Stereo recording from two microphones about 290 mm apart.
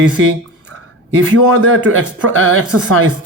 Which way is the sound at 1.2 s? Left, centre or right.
Right.